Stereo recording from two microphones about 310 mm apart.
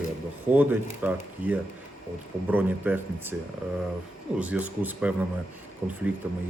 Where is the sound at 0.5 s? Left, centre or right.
Centre.